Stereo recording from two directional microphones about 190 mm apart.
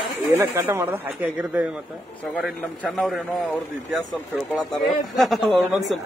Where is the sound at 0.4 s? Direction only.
15° right (ahead or behind).